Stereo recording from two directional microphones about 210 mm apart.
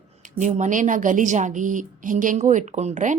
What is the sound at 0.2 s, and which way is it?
A woman's voice, 35° right (ahead or behind).